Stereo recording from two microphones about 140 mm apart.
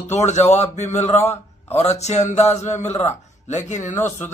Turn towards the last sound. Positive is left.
turn(degrees=60)  # may be behind; listen again after turning